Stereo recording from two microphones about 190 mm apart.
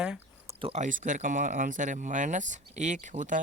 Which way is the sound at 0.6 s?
40° right (ahead or behind).